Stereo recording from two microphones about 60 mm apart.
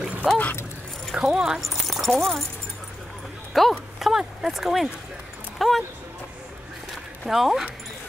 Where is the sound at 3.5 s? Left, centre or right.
Centre.